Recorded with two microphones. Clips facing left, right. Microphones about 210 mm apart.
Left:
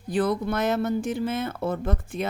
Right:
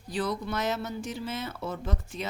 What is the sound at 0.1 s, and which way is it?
Speech, 55° left (ahead or behind).